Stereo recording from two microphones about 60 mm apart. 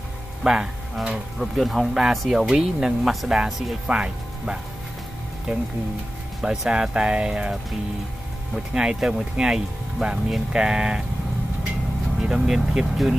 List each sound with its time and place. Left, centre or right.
0.4 s speech: centre
3.9 s speech: centre
5.5 s speech: centre
8.5 s speech: centre
12.2 s speech: centre